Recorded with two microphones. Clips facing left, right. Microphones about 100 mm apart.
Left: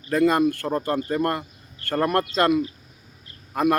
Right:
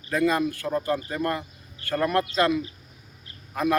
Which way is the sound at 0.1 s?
50° left (ahead or behind).